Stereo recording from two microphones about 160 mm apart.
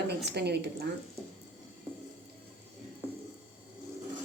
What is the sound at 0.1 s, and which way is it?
Speech, 90° right.